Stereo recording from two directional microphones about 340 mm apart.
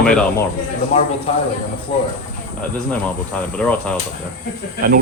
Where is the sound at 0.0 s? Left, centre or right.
Centre.